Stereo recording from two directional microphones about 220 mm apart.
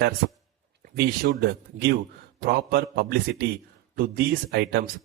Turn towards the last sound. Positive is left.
turn(degrees=-45)  # may be behind; listen again after turning